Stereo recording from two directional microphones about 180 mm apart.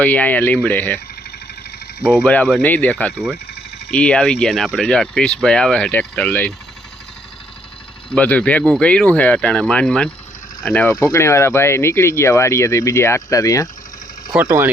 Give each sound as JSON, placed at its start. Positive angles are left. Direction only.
{"t": 0.0, "sound": "speech", "side_deg": 10}
{"t": 2.2, "sound": "speech", "side_deg": 10}
{"t": 8.1, "sound": "speech", "side_deg": 10}
{"t": 10.9, "sound": "speech", "side_deg": 15}
{"t": 14.4, "sound": "speech", "side_deg": -15}